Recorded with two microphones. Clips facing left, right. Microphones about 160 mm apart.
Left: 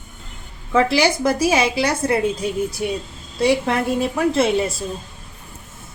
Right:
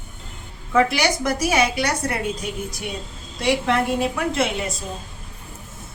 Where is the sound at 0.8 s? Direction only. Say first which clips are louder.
Left 4 dB; 30° left (ahead or behind).